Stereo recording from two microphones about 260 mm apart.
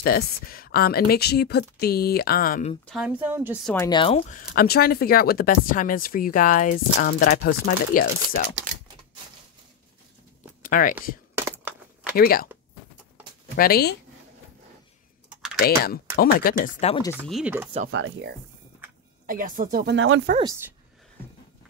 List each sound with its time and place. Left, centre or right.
0.0 s speech: left
2.9 s speech: centre
3.7 s speech: centre
4.6 s speech: left
10.6 s speech: left
11.3 s a sound: centre
12.2 s speech: left
13.6 s speech: left
15.6 s speech: left
17.1 s speech: centre
17.9 s speech: right
19.2 s speech: right
20.3 s speech: centre